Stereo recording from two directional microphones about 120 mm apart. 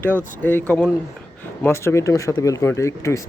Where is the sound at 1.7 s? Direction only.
20° left (ahead or behind).